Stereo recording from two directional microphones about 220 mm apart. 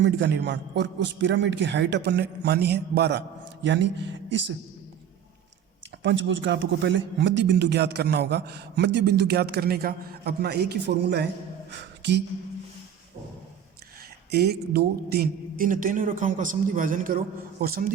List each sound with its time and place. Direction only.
0.0 s a woman's voice: 50° right (ahead or behind)
6.0 s speech: 55° right (ahead or behind)
11.7 s a sound: 50° right (ahead or behind)
14.3 s a man's voice: 45° right (ahead or behind)